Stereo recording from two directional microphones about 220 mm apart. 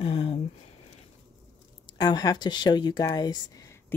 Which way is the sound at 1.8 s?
20° left (ahead or behind).